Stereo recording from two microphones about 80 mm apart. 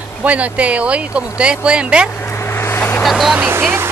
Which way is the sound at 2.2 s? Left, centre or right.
Left.